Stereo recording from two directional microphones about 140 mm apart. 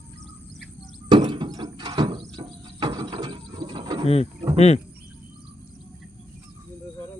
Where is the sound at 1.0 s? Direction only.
35° right (ahead or behind).